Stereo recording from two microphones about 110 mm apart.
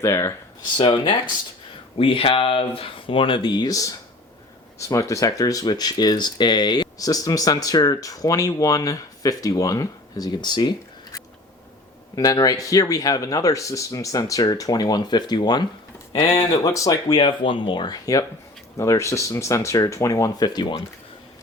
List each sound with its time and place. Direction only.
0.0 s speech: 25° left (ahead or behind)
0.6 s speech: 45° left (ahead or behind)
2.0 s speech: 55° left (ahead or behind); by 15.6 s 40° left (ahead or behind)
16.6 s speech: 30° left (ahead or behind)
17.2 s speech: 50° left (ahead or behind)